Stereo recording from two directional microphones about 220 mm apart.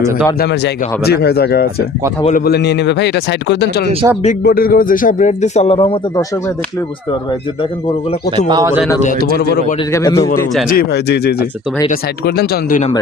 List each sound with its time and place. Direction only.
0.3 s speech: 50° left (ahead or behind)
4.0 s speech: 15° right (ahead or behind)
4.4 s speech: 40° left (ahead or behind); by 6.2 s 25° left (ahead or behind)
8.4 s speech: 20° right (ahead or behind)
9.0 s speech: 40° left (ahead or behind)
9.9 s a man's voice: 15° left (ahead or behind)
10.7 s speech: 45° left (ahead or behind)